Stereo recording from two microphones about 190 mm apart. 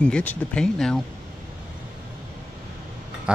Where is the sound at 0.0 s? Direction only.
5° left (ahead or behind).